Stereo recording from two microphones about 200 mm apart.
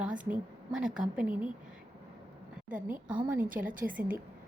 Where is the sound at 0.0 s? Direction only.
5° right (ahead or behind).